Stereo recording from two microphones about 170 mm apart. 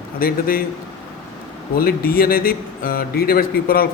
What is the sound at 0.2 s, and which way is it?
Speech, 60° left (ahead or behind).